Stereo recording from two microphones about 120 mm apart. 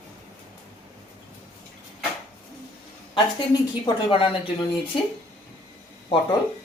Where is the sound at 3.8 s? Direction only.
50° left (ahead or behind).